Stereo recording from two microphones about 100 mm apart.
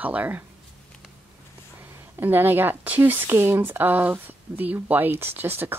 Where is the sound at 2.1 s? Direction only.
20° right (ahead or behind).